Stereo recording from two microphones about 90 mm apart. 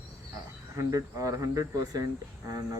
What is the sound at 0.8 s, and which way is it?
Speech, 40° right (ahead or behind).